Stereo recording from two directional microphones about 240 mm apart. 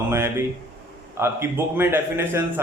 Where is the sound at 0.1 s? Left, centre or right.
Centre.